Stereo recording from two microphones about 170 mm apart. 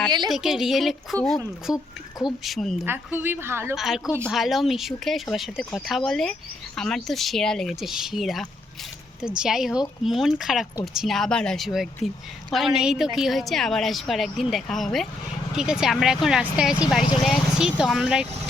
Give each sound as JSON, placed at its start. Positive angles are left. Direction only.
{"t": 0.3, "sound": "a woman's voice", "side_deg": 0}
{"t": 2.8, "sound": "a woman's voice", "side_deg": -10}
{"t": 3.8, "sound": "a woman's voice", "side_deg": 0}